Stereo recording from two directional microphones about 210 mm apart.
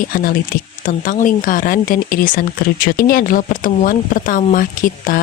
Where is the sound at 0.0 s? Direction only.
45° left (ahead or behind).